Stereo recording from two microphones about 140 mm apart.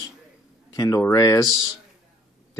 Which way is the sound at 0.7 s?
25° left (ahead or behind).